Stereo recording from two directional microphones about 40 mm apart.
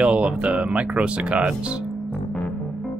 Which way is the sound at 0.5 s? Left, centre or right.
Right.